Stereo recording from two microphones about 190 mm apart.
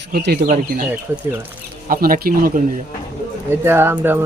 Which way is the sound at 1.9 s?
50° right (ahead or behind).